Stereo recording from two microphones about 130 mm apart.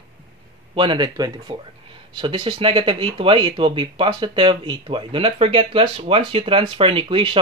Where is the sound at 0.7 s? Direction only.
35° right (ahead or behind).